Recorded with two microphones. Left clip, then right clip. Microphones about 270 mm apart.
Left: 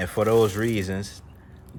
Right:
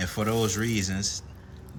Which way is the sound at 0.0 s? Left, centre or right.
Centre.